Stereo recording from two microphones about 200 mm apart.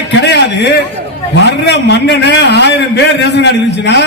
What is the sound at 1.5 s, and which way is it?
A man's voice, 60° left (ahead or behind).